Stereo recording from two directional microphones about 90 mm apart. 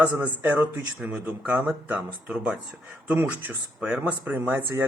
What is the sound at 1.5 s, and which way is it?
Speech, 15° right (ahead or behind).